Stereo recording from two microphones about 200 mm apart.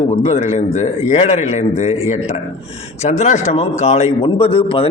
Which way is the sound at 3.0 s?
35° left (ahead or behind).